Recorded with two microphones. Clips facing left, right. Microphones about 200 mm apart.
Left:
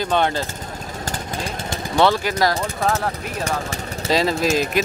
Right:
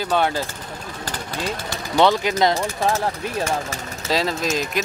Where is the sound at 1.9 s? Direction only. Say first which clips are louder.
Right 1 dB; 20° right (ahead or behind).